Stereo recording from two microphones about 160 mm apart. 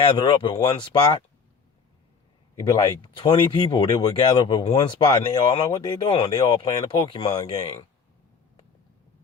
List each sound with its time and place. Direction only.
0.0 s speech: 30° left (ahead or behind)
2.6 s speech: 25° left (ahead or behind)